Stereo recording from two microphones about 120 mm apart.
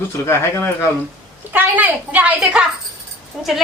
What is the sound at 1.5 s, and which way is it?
A woman's voice, 15° right (ahead or behind).